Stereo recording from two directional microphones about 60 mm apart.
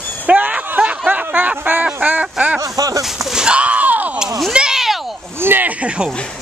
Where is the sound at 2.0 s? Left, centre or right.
Right.